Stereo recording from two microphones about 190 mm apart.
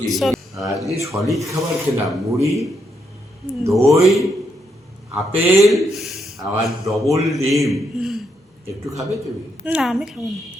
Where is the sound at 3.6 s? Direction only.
15° right (ahead or behind).